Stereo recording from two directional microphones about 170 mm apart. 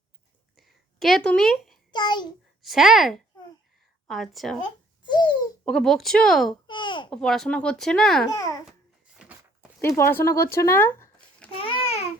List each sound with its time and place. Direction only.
0.5 s a sound: centre (ahead or behind)
1.9 s a child's voice: 25° left (ahead or behind)
2.6 s speech: centre (ahead or behind)
5.0 s a sound: 25° left (ahead or behind)
5.6 s speech: 5° left (ahead or behind)
6.7 s babbling: 30° left (ahead or behind)
7.1 s speech: 5° left (ahead or behind)
8.3 s a child's voice: 20° left (ahead or behind)
9.8 s speech: 15° left (ahead or behind)
11.5 s babbling: 35° left (ahead or behind)